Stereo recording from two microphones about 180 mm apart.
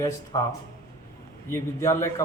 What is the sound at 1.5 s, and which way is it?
Speech, 15° left (ahead or behind).